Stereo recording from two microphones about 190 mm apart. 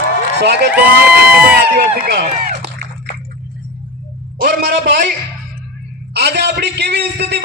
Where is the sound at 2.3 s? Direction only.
40° right (ahead or behind).